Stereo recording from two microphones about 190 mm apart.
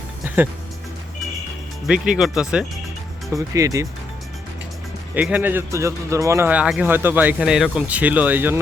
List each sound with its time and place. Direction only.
1.9 s speech: 5° right (ahead or behind)
3.3 s a man's voice: 15° right (ahead or behind)
5.1 s a man's voice: 10° right (ahead or behind)